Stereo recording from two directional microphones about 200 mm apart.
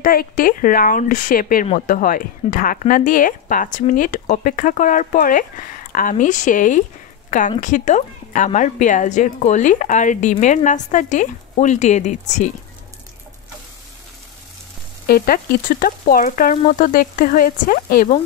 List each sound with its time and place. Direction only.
0.0 s frying: 45° left (ahead or behind)
1.7 s a woman's voice: 40° left (ahead or behind)
15.0 s frying: 50° left (ahead or behind)